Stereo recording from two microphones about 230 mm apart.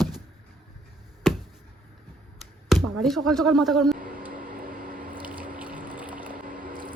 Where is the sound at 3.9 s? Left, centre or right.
Right.